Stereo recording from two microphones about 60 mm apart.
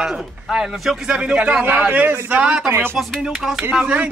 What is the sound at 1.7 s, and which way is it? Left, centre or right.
Speech, right.